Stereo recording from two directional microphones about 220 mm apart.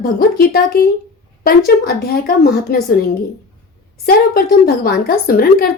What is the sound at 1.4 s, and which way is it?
A woman's voice, 40° left (ahead or behind).